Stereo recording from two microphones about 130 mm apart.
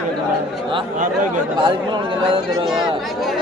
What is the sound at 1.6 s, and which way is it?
Speech, 35° right (ahead or behind).